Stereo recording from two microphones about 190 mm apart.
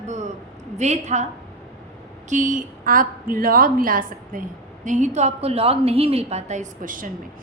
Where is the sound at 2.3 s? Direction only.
45° right (ahead or behind).